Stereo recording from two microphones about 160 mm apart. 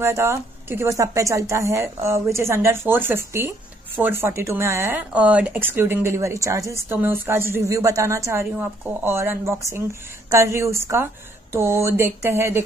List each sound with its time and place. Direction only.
0.0 s speech: 15° right (ahead or behind)